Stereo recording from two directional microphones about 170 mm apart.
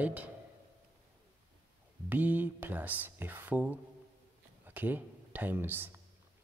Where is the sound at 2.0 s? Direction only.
10° right (ahead or behind).